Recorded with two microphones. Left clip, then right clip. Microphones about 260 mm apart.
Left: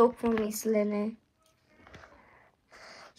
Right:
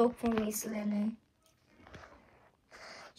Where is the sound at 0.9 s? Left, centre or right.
Centre.